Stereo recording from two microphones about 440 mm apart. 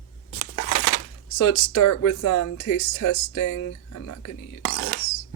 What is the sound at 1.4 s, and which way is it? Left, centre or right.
Speech, left.